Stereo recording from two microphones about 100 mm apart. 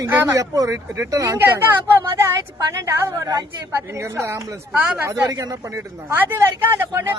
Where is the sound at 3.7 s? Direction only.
30° right (ahead or behind).